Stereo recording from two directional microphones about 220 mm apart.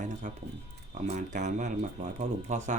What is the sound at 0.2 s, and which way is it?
Speech, 35° right (ahead or behind).